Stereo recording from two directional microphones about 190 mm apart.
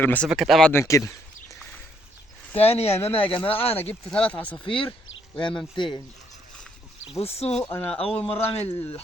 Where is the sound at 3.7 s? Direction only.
10° left (ahead or behind).